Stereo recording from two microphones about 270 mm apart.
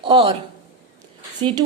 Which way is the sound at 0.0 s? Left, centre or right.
Centre.